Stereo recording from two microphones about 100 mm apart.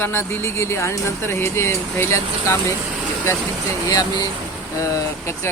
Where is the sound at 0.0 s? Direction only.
25° left (ahead or behind).